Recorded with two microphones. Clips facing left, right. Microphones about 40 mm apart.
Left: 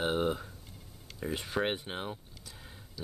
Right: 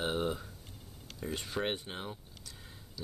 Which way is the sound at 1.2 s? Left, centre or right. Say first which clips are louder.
Left 3 dB; centre.